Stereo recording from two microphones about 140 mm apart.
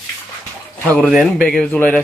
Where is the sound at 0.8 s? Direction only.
Centre (ahead or behind).